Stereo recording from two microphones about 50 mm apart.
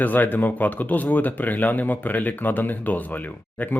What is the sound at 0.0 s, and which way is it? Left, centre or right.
Speech, left.